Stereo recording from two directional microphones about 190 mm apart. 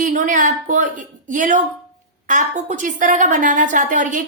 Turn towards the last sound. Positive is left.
turn(degrees=-40)  # may be behind; listen again after turning